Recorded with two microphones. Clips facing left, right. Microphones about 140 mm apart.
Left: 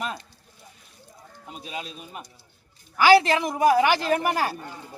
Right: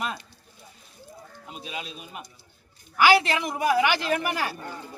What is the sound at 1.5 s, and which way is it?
Speech, 40° left (ahead or behind).